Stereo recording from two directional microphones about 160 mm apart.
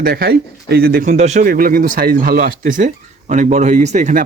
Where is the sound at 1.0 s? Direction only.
45° right (ahead or behind).